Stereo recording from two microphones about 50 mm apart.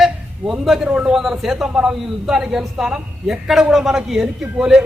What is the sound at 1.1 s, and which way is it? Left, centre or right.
A man's voice, centre.